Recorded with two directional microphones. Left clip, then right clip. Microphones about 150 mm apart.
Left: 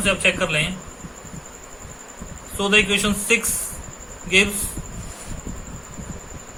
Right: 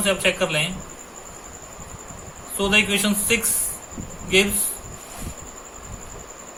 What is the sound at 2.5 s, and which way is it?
Speech, 30° left (ahead or behind).